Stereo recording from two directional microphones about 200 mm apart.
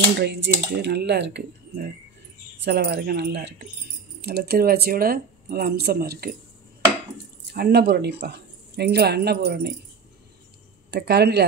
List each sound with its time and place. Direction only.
0.2 s speech: 55° right (ahead or behind)
7.5 s speech: 55° right (ahead or behind)
10.9 s speech: 55° right (ahead or behind)